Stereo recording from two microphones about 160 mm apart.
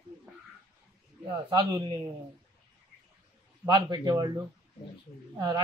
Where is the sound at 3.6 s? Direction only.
30° right (ahead or behind).